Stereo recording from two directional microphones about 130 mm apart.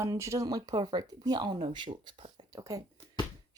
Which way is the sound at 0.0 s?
20° right (ahead or behind).